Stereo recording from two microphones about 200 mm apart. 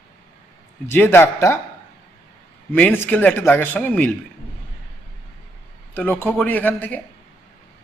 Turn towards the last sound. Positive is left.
turn(degrees=10)  # may be behind; listen again after turning